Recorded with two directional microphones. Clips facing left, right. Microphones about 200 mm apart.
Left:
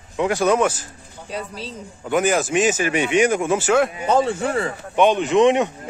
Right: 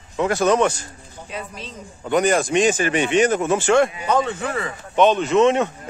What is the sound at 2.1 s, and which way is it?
Speech, 5° left (ahead or behind).